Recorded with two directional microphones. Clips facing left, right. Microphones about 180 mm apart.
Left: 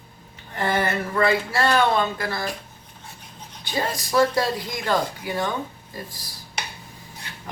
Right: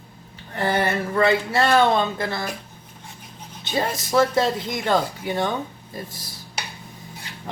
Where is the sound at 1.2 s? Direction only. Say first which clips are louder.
Right 2 dB; 25° right (ahead or behind).